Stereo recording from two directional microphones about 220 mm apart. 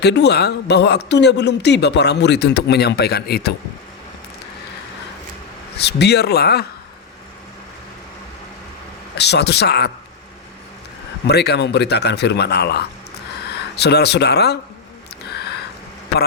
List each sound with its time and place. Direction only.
0.0 s speech: 50° left (ahead or behind)
5.7 s speech: 50° left (ahead or behind)
9.1 s speech: 50° left (ahead or behind)
11.3 s speech: 50° left (ahead or behind)